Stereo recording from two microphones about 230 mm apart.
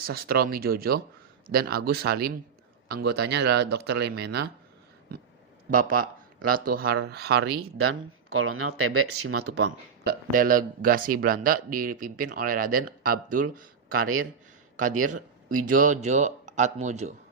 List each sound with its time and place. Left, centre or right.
0.0 s speech: right
5.7 s speech: right
7.8 s speech: right
10.0 s speech: right
15.5 s speech: right